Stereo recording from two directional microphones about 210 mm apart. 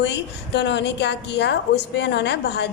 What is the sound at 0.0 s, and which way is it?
A woman's voice, 55° left (ahead or behind).